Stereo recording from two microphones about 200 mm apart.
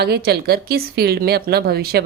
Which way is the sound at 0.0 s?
55° right (ahead or behind).